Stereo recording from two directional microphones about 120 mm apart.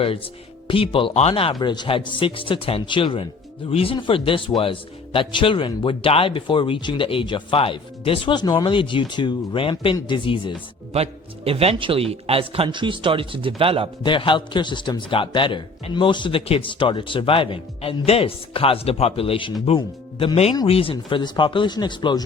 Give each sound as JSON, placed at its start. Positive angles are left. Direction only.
{"t": 0.7, "sound": "speech", "side_deg": 50}
{"t": 1.5, "sound": "speech", "side_deg": 40}
{"t": 10.9, "sound": "a man's voice", "side_deg": -55}
{"t": 12.6, "sound": "a man's voice", "side_deg": -40}
{"t": 14.0, "sound": "speech", "side_deg": 45}